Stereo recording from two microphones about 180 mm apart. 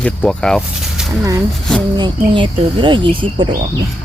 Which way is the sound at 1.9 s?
25° right (ahead or behind).